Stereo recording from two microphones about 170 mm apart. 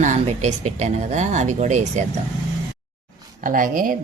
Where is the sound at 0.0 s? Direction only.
45° right (ahead or behind).